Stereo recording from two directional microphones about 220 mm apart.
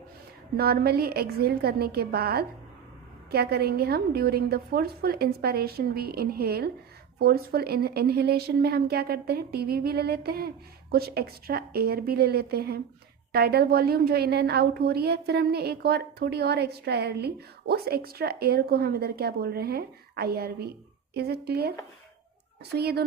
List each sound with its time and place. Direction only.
0.5 s a woman's voice: 45° right (ahead or behind)
22.7 s a woman's voice: 45° right (ahead or behind)